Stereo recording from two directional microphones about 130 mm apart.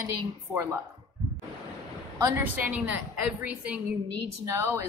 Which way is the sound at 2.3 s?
15° right (ahead or behind).